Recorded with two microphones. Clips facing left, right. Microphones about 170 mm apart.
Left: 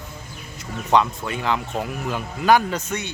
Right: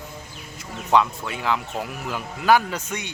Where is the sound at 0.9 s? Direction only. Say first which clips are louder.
Left 1 dB; 5° right (ahead or behind).